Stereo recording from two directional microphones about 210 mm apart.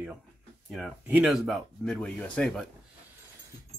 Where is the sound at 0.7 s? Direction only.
5° right (ahead or behind).